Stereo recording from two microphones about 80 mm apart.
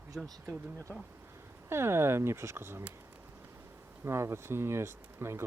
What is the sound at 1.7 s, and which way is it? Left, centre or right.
Speech, right.